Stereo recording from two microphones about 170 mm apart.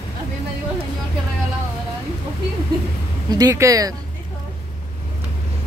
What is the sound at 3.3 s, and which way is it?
Speech, 20° right (ahead or behind).